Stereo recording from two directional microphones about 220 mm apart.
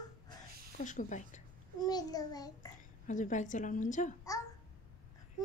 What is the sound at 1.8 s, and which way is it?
Child singing, 15° left (ahead or behind).